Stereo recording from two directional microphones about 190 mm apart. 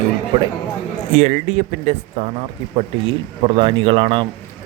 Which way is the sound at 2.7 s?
30° right (ahead or behind).